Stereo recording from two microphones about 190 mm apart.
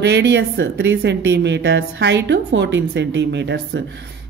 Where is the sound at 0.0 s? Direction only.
65° right (ahead or behind).